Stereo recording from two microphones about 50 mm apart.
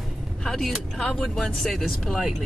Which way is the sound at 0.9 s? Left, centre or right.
Centre.